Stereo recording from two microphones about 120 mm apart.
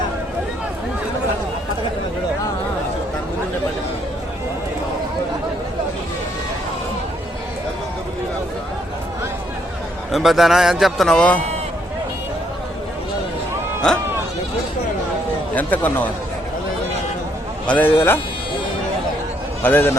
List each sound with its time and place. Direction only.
10.1 s a man's voice: centre (ahead or behind)
15.5 s a man's voice: 15° left (ahead or behind)
17.7 s a man's voice: 15° left (ahead or behind)
19.6 s a man's voice: 15° left (ahead or behind)